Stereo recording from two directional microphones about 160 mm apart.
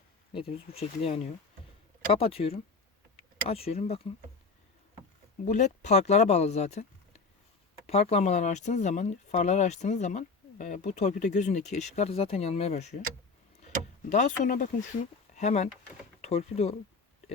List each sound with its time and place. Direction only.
0.3 s speech: 35° left (ahead or behind)
5.5 s speech: 50° left (ahead or behind)
14.1 s speech: 50° left (ahead or behind)